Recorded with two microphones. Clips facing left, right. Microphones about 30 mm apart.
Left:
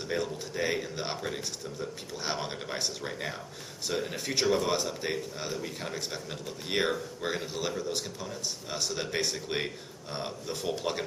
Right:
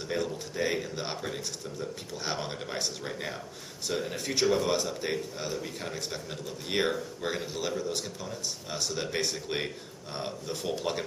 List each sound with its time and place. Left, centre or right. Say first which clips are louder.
0.1 s speech: even; centre